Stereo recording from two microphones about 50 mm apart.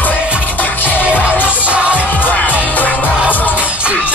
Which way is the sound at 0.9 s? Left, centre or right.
Right.